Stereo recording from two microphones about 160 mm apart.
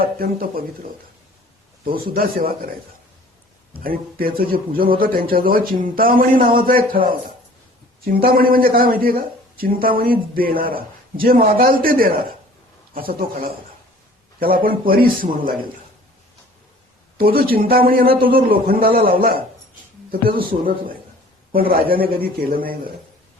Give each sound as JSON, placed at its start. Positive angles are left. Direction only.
{"t": 0.0, "sound": "a man's voice", "side_deg": -65}
{"t": 3.8, "sound": "a man's voice", "side_deg": -65}
{"t": 8.0, "sound": "a man's voice", "side_deg": -70}
{"t": 17.2, "sound": "a man's voice", "side_deg": -70}
{"t": 21.9, "sound": "a man's voice", "side_deg": -70}